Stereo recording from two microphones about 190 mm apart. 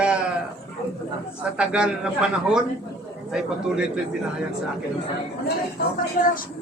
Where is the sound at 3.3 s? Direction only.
5° right (ahead or behind).